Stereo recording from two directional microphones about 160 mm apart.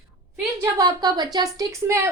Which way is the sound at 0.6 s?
20° right (ahead or behind).